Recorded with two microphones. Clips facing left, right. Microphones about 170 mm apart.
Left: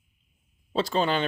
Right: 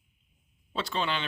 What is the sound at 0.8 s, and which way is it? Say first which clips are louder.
Speech: left 7 dB; 40° left (ahead or behind).